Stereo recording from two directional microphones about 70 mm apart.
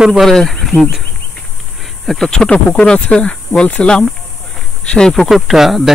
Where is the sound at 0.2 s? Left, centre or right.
Centre.